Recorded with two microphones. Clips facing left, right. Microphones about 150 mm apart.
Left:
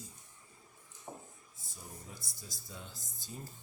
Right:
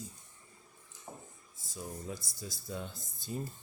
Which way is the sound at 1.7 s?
85° right.